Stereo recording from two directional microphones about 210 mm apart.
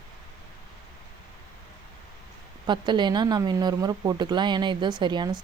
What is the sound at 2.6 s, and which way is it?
Speech, 20° right (ahead or behind).